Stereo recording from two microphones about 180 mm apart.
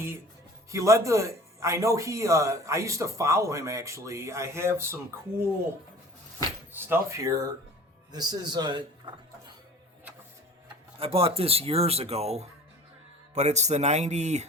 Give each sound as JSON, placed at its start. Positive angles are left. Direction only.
{"t": 0.7, "sound": "speech", "side_deg": -15}
{"t": 6.7, "sound": "a man's voice", "side_deg": -15}
{"t": 11.0, "sound": "speech", "side_deg": -30}